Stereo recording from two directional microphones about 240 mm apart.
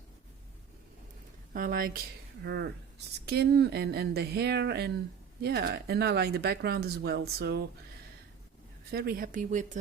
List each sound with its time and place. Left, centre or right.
1.5 s speech: right
8.9 s speech: right